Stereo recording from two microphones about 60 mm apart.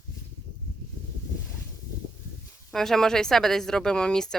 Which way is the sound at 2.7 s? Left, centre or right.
Centre.